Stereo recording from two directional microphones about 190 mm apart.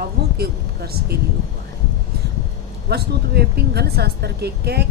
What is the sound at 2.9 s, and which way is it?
Speech, 60° right (ahead or behind).